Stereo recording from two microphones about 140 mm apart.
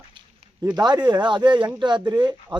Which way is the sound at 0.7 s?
30° right (ahead or behind).